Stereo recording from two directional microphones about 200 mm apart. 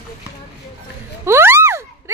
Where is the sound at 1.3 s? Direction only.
10° right (ahead or behind).